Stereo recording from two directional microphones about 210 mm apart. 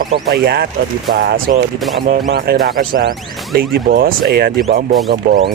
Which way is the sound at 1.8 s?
Centre (ahead or behind).